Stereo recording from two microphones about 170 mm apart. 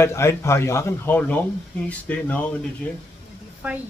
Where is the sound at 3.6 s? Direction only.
10° right (ahead or behind).